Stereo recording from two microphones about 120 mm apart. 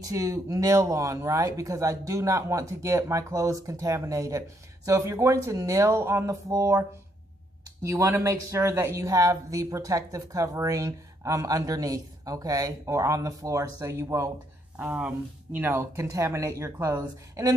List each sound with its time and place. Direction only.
0.0 s speech: 30° right (ahead or behind)
7.8 s speech: 25° right (ahead or behind)
14.8 s speech: 10° right (ahead or behind); by 17.6 s 30° right (ahead or behind)